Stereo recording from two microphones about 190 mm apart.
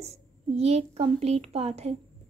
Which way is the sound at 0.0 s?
35° right (ahead or behind).